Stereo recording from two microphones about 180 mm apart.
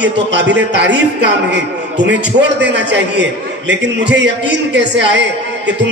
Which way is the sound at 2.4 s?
75° right (ahead or behind).